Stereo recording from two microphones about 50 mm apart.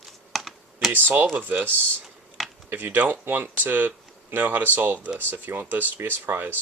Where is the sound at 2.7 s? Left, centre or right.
Right.